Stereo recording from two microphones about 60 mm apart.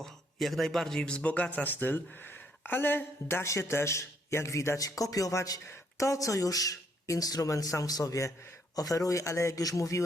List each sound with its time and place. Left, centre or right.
0.0 s a man's voice: centre; by 4.8 s left
5.1 s speech: left
8.7 s speech: left